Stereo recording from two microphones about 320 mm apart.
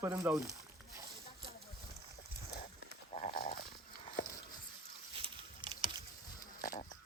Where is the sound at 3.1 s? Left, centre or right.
Centre.